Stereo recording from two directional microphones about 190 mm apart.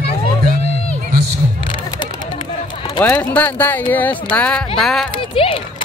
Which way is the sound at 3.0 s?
10° left (ahead or behind).